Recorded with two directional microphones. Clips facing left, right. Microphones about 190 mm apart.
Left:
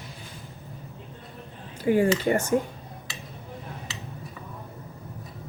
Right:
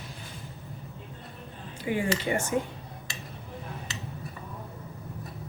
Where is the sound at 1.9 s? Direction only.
45° left (ahead or behind).